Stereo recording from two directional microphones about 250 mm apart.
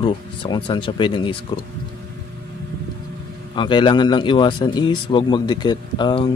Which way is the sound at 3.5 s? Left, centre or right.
Centre.